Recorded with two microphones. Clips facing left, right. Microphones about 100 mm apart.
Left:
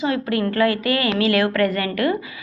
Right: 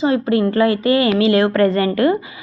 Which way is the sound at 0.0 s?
25° right (ahead or behind).